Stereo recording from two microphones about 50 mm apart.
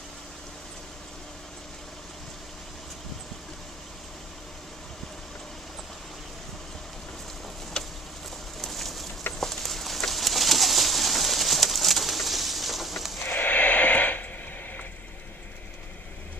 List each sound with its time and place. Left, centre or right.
8.5 s a sound: centre
9.4 s bird: centre
13.2 s snort: left